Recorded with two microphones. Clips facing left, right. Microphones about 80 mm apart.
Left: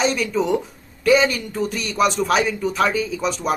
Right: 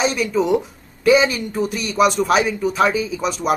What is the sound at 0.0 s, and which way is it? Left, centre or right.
Speech, centre.